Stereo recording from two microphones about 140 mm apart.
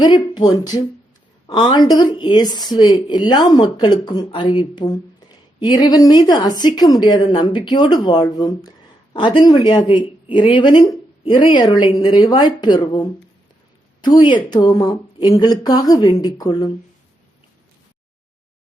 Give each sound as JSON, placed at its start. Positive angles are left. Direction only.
{"t": 0.0, "sound": "speech", "side_deg": 30}